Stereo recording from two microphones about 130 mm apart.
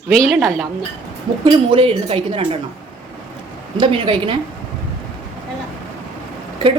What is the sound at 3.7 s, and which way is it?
Speech, 40° right (ahead or behind).